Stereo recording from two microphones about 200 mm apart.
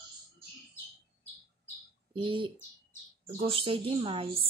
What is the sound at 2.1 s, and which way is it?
Speech, 25° right (ahead or behind).